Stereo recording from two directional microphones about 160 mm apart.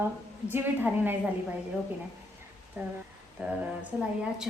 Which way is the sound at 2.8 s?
10° right (ahead or behind).